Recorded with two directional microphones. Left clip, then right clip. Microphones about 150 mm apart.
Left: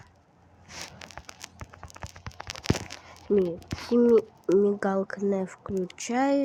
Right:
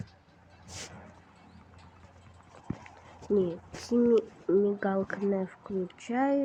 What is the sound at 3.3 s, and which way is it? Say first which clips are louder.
Speech: left 3 dB; 10° left (ahead or behind).